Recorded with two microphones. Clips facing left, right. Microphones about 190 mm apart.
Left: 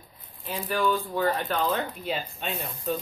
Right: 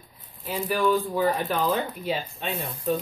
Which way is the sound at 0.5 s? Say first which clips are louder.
Right 3 dB; 10° right (ahead or behind).